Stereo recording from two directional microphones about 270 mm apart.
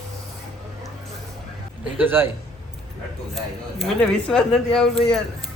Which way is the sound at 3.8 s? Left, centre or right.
Centre.